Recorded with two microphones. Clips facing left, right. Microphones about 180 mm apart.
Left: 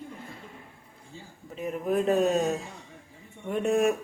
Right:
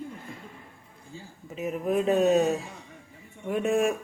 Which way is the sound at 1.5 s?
5° right (ahead or behind).